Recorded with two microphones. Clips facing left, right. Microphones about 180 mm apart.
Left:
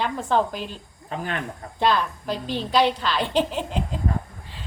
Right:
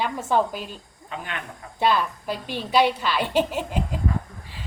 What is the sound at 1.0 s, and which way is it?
Speech, 40° left (ahead or behind).